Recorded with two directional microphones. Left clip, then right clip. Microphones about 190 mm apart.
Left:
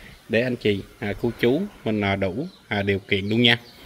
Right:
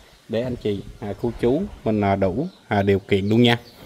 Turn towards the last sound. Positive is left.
turn(degrees=-20)  # may be behind; listen again after turning